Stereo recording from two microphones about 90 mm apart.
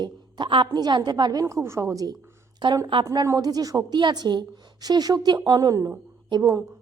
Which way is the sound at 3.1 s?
45° right (ahead or behind).